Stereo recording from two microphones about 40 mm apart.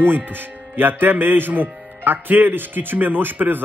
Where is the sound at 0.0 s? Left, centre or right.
Right.